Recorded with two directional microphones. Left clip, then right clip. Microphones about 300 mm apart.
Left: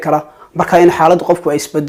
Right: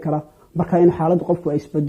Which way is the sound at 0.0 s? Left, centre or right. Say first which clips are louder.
Left 10 dB; centre.